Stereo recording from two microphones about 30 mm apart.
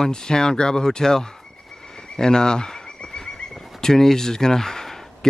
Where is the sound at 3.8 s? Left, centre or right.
Centre.